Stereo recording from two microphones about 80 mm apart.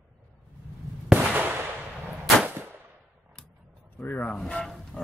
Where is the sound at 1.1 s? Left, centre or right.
Right.